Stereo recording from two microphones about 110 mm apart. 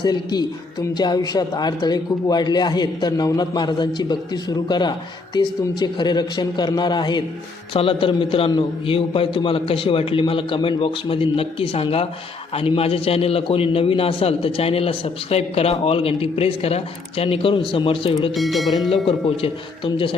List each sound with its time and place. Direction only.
0.0 s a man's voice: 40° left (ahead or behind)
7.7 s a man's voice: 55° left (ahead or behind)
18.3 s speech: centre (ahead or behind)
19.0 s speech: 55° left (ahead or behind)